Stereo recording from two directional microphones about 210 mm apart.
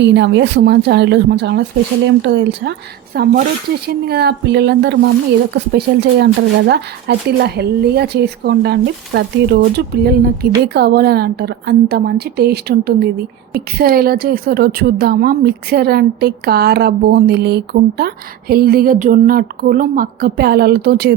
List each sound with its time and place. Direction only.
0.0 s a woman's voice: 55° right (ahead or behind)